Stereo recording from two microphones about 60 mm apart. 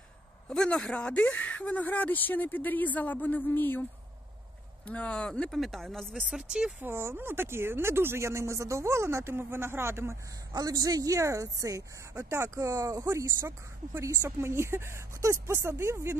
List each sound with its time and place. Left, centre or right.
0.5 s speech: centre; by 3.8 s left
4.8 s speech: centre
5.5 s speech: centre
6.3 s speech: centre
6.9 s speech: right
10.5 s a woman's voice: right
12.1 s speech: right
13.0 s speech: right
14.0 s speech: right